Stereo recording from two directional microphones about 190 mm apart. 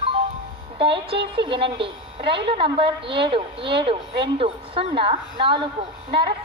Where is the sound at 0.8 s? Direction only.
25° right (ahead or behind).